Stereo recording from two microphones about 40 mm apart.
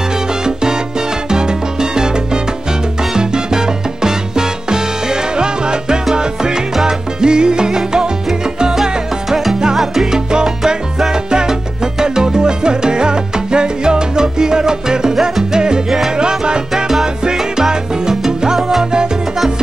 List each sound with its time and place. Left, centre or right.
0.4 s salsa music: centre
9.8 s salsa music: centre